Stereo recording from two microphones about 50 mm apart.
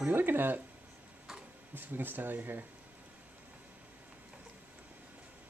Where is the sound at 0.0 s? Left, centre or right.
Right.